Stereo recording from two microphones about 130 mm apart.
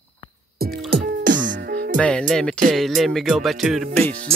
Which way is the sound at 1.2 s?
90° right.